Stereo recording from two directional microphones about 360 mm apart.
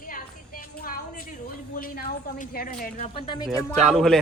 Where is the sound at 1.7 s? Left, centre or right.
Left.